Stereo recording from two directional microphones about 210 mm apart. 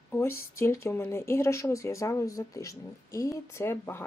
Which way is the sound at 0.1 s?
10° left (ahead or behind).